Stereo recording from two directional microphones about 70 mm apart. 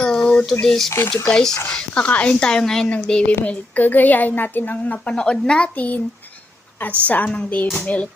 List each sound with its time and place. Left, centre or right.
0.0 s a sound: centre
0.6 s a woman's voice: centre; by 6.0 s left
7.1 s a woman's voice: left